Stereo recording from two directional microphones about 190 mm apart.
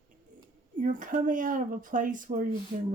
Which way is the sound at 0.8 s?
45° right (ahead or behind).